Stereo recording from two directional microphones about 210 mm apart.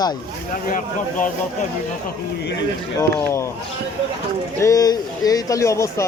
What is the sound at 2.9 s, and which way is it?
Speech, 15° left (ahead or behind).